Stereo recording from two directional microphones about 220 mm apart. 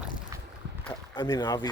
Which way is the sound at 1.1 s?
15° left (ahead or behind).